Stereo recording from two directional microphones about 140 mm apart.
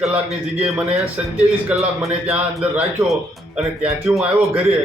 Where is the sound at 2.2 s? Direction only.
5° right (ahead or behind).